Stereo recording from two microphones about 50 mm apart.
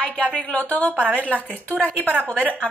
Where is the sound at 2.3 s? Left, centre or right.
Right.